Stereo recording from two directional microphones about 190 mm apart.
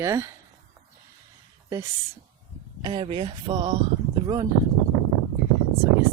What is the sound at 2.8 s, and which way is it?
Speech, 25° right (ahead or behind).